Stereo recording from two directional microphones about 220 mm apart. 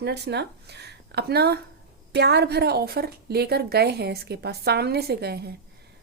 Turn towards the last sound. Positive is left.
turn(degrees=-45)  # may be behind; listen again after turning